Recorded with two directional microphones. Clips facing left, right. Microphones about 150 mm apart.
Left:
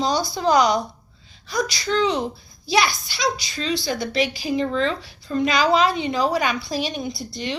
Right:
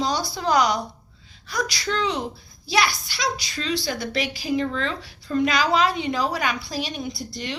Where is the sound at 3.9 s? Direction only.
30° left (ahead or behind).